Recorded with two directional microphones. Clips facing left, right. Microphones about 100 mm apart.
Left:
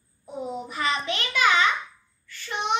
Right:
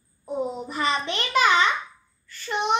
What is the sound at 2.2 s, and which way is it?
Child singing, 40° right (ahead or behind).